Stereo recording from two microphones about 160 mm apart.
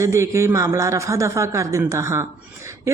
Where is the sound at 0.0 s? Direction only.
20° right (ahead or behind).